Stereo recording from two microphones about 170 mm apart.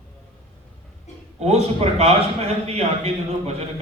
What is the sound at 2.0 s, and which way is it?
A man's voice, 40° right (ahead or behind).